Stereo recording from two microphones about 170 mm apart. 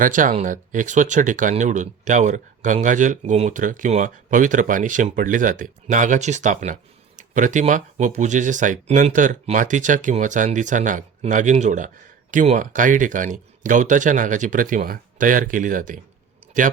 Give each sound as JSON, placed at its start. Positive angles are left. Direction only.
{"t": 0.0, "sound": "speech", "side_deg": -50}